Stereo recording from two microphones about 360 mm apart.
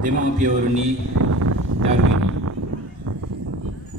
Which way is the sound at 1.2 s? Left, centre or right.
Right.